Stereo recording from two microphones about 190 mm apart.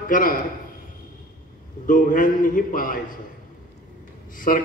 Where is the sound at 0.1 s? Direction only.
45° left (ahead or behind).